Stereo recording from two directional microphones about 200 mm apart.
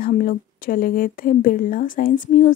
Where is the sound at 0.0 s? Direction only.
45° left (ahead or behind).